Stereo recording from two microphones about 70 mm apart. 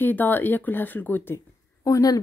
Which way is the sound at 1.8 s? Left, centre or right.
Left.